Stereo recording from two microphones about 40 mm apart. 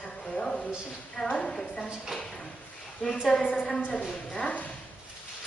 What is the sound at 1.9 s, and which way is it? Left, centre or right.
Speech, centre.